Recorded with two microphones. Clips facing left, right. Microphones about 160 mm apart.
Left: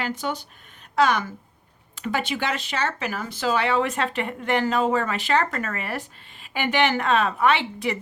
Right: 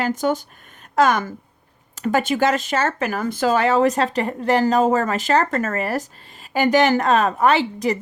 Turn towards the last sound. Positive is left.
turn(degrees=-40)  # may be behind; listen again after turning